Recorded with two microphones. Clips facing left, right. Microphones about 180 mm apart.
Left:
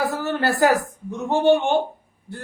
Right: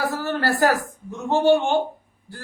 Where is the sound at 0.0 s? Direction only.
20° left (ahead or behind).